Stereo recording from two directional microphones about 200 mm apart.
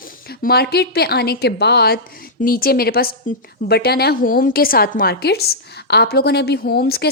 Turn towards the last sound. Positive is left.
turn(degrees=50)  # may be behind; listen again after turning